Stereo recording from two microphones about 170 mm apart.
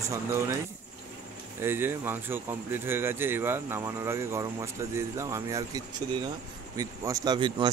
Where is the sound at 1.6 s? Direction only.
15° right (ahead or behind).